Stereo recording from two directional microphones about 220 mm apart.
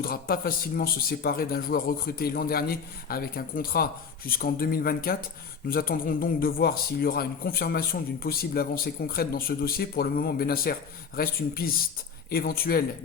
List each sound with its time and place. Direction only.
0.0 s a man's voice: 45° left (ahead or behind)